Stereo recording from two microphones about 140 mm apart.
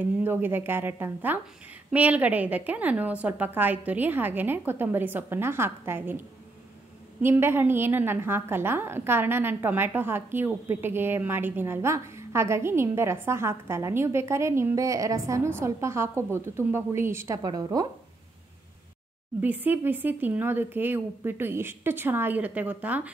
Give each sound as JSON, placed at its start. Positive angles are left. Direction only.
{"t": 0.0, "sound": "a woman's voice", "side_deg": -15}
{"t": 19.4, "sound": "a woman's voice", "side_deg": -15}